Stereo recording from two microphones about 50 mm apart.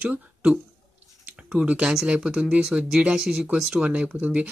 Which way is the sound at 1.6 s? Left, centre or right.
Right.